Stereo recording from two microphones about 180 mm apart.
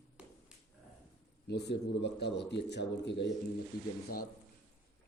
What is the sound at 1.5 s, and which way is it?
A man's voice, 70° left (ahead or behind).